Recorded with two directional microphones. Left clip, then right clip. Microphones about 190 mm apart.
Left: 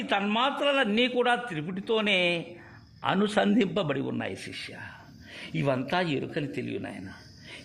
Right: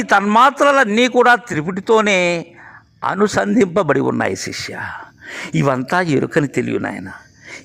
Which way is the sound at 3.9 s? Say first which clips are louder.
Right 15 dB; 40° right (ahead or behind).